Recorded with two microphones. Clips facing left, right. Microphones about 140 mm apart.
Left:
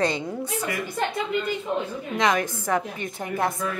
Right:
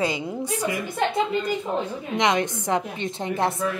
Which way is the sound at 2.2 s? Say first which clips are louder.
Right 1 dB; 20° right (ahead or behind).